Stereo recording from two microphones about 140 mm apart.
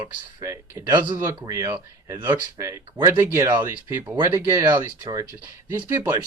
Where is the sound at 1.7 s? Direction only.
20° right (ahead or behind).